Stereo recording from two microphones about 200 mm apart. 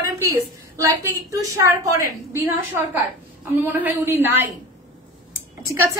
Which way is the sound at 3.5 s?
10° right (ahead or behind).